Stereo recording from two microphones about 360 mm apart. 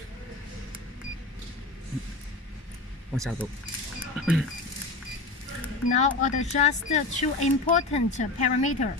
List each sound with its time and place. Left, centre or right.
3.2 s speech: centre
4.0 s a sound: centre
6.0 s speech: centre